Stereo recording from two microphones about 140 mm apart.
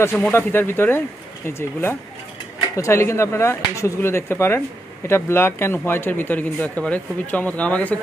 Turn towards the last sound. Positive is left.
turn(degrees=10)  # may be behind; listen again after turning